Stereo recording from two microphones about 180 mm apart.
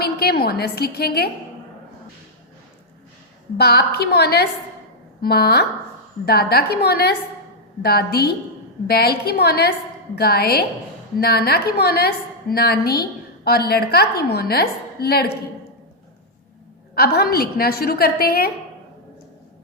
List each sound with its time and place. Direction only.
0.0 s a woman's voice: 60° left (ahead or behind)
3.6 s a woman's voice: 65° left (ahead or behind)
16.9 s a woman's voice: 60° left (ahead or behind)